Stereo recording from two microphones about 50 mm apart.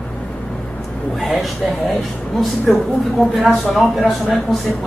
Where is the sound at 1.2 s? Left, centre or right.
Centre.